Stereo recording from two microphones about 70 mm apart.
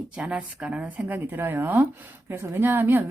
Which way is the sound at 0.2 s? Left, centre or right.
Centre.